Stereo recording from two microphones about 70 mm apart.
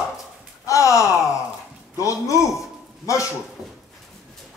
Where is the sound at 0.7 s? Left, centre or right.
Left.